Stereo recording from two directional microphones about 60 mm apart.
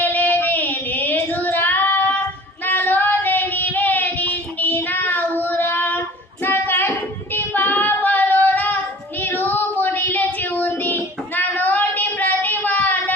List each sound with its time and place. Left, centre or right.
0.0 s child singing: left
2.6 s female singing: left
5.4 s child singing: left
6.4 s hands: left
7.3 s child singing: left